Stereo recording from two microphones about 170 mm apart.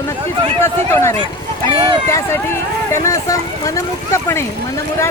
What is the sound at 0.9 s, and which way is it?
Speech, 15° left (ahead or behind).